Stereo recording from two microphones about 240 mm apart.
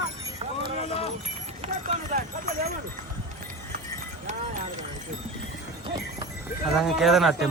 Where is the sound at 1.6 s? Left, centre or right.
Right.